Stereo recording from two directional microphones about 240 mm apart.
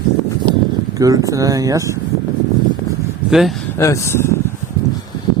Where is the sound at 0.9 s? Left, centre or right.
Centre.